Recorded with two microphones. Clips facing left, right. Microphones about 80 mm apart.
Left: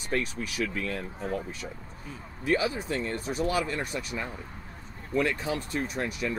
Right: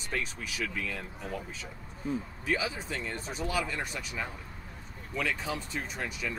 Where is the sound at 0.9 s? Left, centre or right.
Left.